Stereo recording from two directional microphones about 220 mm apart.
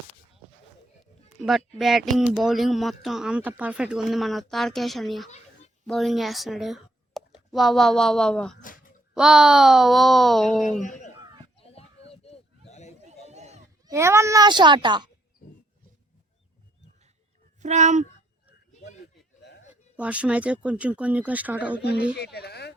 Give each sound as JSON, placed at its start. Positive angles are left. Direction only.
{"t": 1.4, "sound": "speech", "side_deg": 0}
{"t": 10.7, "sound": "speech", "side_deg": 35}
{"t": 11.6, "sound": "a sound", "side_deg": 25}
{"t": 13.1, "sound": "a sound", "side_deg": -30}
{"t": 13.8, "sound": "a child's voice", "side_deg": -15}
{"t": 17.6, "sound": "speech", "side_deg": -30}
{"t": 19.4, "sound": "a sound", "side_deg": 50}
{"t": 20.0, "sound": "speech", "side_deg": -5}
{"t": 22.2, "sound": "speech", "side_deg": 45}